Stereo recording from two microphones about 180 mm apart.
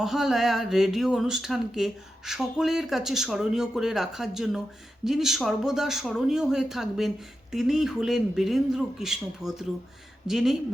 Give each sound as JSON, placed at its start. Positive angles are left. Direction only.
{"t": 0.0, "sound": "speech", "side_deg": 0}